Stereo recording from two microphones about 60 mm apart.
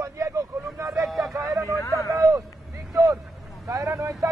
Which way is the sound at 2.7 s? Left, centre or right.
Right.